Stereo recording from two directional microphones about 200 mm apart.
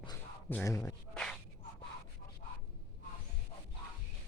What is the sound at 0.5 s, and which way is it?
Speech, 15° left (ahead or behind).